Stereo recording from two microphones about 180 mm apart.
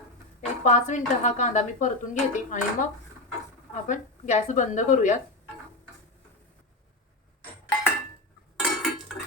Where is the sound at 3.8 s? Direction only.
45° left (ahead or behind).